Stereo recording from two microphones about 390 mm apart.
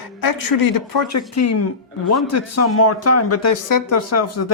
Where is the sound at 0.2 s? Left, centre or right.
Left.